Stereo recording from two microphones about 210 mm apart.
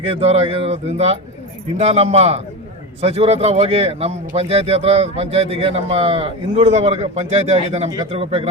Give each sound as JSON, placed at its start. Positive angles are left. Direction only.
{"t": 0.0, "sound": "speech", "side_deg": -30}